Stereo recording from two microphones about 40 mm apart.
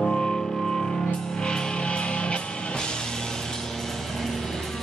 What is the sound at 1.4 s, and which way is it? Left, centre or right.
Music, centre.